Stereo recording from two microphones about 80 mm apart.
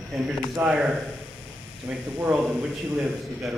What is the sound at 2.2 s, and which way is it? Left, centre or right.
Speech, right.